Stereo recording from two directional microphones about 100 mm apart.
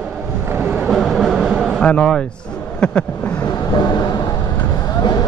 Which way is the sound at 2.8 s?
10° left (ahead or behind).